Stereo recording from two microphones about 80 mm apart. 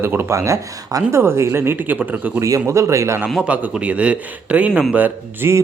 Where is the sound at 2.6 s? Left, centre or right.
Right.